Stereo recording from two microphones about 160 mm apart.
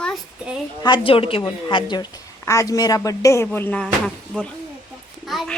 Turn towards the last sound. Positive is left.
turn(degrees=0)  # may be behind; listen again after turning